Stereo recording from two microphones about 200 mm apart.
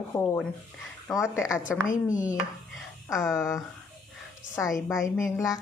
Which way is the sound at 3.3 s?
15° left (ahead or behind).